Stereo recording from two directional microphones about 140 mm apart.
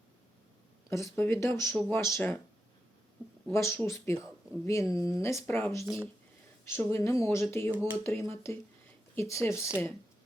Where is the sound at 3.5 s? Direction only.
20° left (ahead or behind).